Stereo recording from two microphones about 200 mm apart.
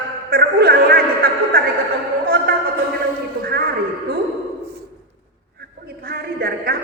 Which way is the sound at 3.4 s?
45° right (ahead or behind).